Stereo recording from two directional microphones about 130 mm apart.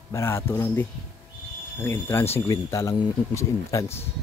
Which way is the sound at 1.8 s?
15° left (ahead or behind).